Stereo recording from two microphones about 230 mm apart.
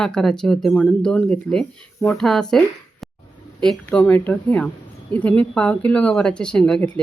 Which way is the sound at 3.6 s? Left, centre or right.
Centre.